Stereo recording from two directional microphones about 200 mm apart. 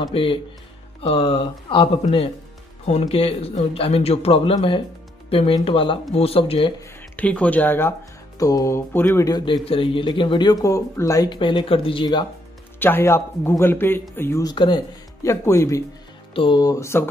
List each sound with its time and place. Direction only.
0.0 s speech: 25° left (ahead or behind)
7.2 s speech: 5° left (ahead or behind); by 12.3 s 25° left (ahead or behind)
12.7 s speech: 10° left (ahead or behind)